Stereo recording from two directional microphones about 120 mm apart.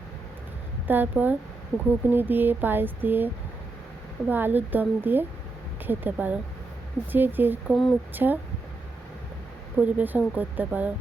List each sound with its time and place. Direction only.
0.9 s speech: 15° right (ahead or behind)
4.3 s speech: 15° right (ahead or behind)
7.7 s speech: centre (ahead or behind)
8.1 s speech: 15° right (ahead or behind)
9.7 s speech: 15° right (ahead or behind)